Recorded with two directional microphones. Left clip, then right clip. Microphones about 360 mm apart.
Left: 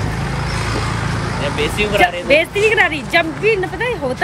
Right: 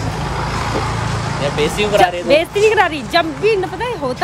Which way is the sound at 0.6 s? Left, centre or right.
Right.